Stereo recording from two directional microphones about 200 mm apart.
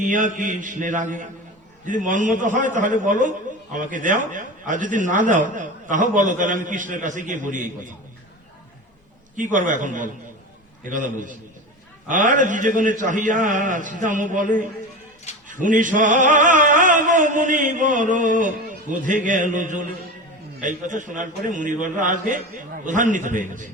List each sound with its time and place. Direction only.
0.0 s a man's voice: 40° right (ahead or behind)
9.3 s a man's voice: 40° right (ahead or behind)